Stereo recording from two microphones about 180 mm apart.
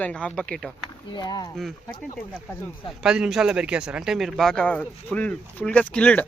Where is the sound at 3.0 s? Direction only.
5° right (ahead or behind).